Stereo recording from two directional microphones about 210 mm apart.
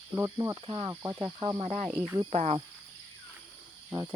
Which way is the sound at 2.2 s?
30° right (ahead or behind).